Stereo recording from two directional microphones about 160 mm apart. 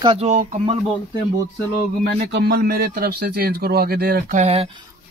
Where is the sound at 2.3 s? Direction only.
90° right; by 4.3 s 70° right (ahead or behind).